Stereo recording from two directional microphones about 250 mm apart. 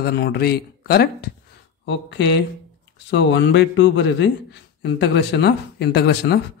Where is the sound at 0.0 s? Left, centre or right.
Left.